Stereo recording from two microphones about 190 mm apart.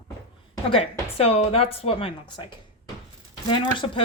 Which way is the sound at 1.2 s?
30° left (ahead or behind).